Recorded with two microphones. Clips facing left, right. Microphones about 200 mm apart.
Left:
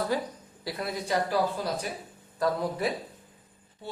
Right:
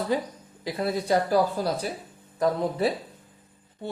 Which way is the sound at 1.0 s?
35° right (ahead or behind).